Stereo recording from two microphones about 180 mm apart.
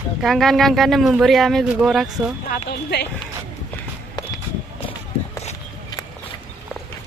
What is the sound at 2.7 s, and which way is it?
Speech, 65° left (ahead or behind).